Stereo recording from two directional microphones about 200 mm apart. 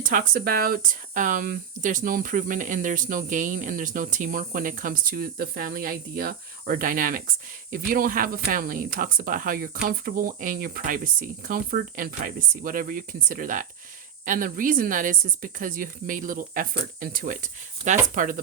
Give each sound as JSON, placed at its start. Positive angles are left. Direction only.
{"t": 0.0, "sound": "speech", "side_deg": -45}